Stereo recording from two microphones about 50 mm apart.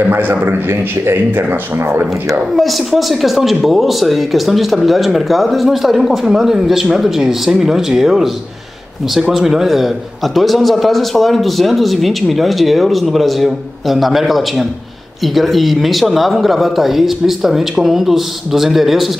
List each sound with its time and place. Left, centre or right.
0.0 s a man's voice: right
0.7 s speech: right
2.5 s speech: centre
9.3 s speech: centre